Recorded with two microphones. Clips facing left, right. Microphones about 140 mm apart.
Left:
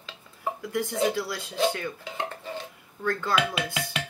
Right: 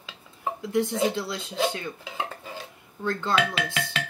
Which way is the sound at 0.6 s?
25° right (ahead or behind).